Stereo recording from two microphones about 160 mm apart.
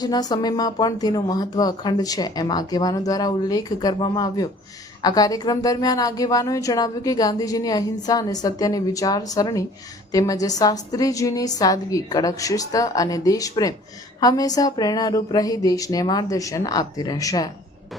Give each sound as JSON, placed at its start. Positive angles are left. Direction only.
{"t": 0.0, "sound": "a woman's voice", "side_deg": 25}